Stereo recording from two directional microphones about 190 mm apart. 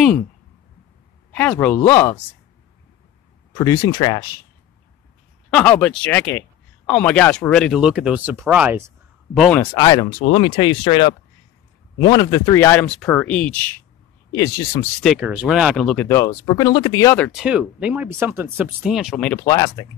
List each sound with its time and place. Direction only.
1.3 s speech: 10° left (ahead or behind)
3.5 s speech: 20° left (ahead or behind)
5.5 s speech: 5° left (ahead or behind)
9.3 s speech: 5° left (ahead or behind)
9.8 s speech: 20° left (ahead or behind)
15.0 s speech: 5° right (ahead or behind)
16.1 s speech: 15° left (ahead or behind)
17.3 s speech: 5° right (ahead or behind)
19.4 s speech: 20° left (ahead or behind)